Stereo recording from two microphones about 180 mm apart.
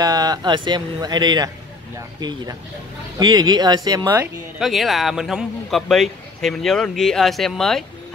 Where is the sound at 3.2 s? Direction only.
20° right (ahead or behind).